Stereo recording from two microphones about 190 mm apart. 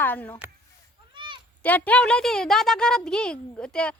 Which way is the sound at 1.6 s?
10° left (ahead or behind).